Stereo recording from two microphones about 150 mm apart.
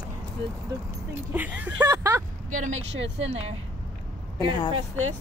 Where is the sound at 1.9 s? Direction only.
20° right (ahead or behind).